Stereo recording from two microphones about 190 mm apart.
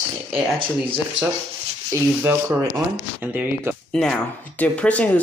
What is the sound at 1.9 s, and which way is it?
Speech, 15° right (ahead or behind).